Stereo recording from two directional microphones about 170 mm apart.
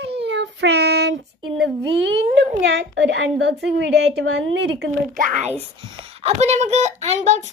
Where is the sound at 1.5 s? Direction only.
90° right.